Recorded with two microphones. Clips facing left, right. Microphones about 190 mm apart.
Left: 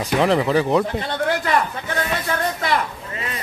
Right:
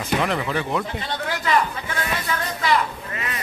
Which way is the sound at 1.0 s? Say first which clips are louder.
Left 4 dB; 50° left (ahead or behind).